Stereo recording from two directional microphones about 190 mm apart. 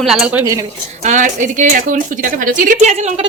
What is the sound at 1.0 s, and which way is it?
Speech, 40° right (ahead or behind).